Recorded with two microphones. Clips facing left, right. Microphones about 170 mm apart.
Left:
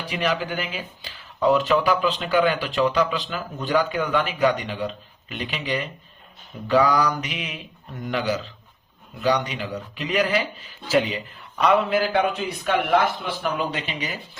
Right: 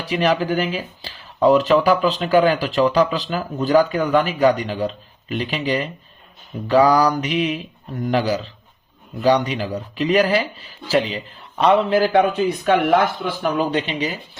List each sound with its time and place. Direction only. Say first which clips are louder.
0.1 s speech: right 7 dB; 40° right (ahead or behind)
12.1 s speech: right 6 dB; 40° right (ahead or behind)